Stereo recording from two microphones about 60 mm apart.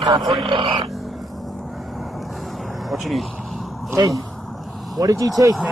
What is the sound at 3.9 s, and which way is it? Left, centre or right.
Speech, right.